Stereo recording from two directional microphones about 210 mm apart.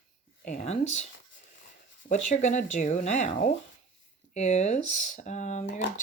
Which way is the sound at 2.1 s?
35° left (ahead or behind).